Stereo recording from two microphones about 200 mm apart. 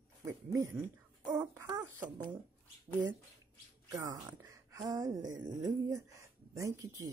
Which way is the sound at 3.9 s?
20° right (ahead or behind).